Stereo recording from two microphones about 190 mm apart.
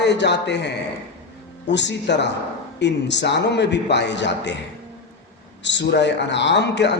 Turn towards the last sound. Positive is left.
turn(degrees=65)  # may be behind; listen again after turning